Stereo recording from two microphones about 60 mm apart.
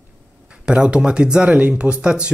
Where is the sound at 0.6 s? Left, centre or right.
Centre.